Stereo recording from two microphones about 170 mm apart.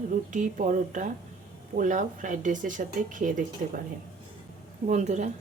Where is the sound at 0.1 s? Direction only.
50° right (ahead or behind).